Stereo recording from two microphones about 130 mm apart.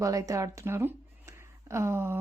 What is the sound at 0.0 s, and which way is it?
Speech, 25° right (ahead or behind).